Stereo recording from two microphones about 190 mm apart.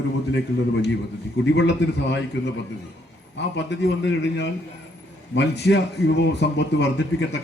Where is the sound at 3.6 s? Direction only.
70° left (ahead or behind).